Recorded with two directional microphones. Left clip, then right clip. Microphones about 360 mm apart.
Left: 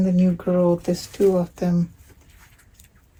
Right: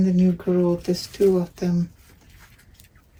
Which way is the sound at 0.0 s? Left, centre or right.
Centre.